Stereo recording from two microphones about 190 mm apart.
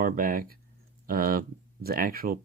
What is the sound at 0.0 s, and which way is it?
Speech, 50° right (ahead or behind).